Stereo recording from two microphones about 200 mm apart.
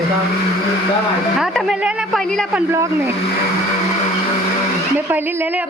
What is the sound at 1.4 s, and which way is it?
Speech, centre (ahead or behind).